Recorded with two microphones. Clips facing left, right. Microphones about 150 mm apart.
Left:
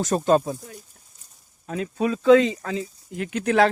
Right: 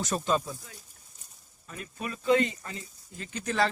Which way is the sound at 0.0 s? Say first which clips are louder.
Left 9 dB; 50° left (ahead or behind).